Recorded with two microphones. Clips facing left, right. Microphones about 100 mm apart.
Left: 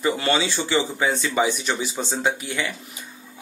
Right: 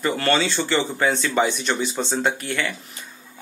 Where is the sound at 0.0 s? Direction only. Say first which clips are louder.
Right 1 dB; 15° left (ahead or behind).